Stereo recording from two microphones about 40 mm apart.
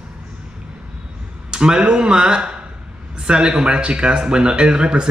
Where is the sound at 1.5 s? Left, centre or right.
Right.